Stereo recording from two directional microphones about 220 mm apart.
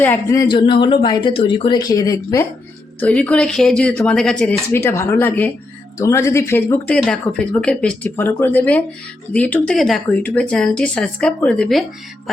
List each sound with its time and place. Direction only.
0.0 s speech: 10° left (ahead or behind)